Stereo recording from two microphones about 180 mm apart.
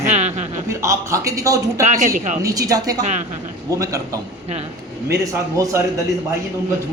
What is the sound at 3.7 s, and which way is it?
Speech, 20° right (ahead or behind).